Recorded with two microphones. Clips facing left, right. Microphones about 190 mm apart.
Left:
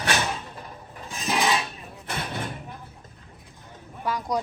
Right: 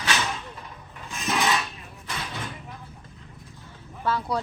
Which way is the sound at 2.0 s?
55° left (ahead or behind).